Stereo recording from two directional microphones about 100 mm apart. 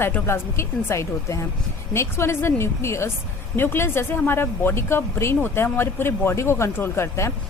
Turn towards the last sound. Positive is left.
turn(degrees=25)  # may be behind; listen again after turning